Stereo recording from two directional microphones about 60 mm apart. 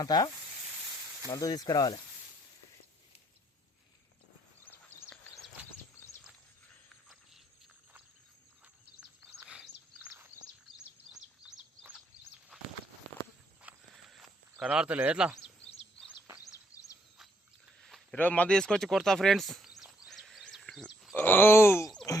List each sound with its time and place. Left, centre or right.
0.0 s speech: left
1.3 s speech: left
6.0 s horse: left
11.1 s bird: centre
13.9 s horse: centre
14.6 s speech: centre
15.6 s bird: centre
16.4 s a sound: left
18.1 s speech: left
18.4 s speech: centre
20.1 s a sound: centre
20.6 s wild animals: centre
21.2 s groan: left